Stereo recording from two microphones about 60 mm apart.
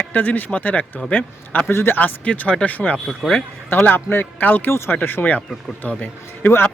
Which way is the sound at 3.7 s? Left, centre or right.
Left.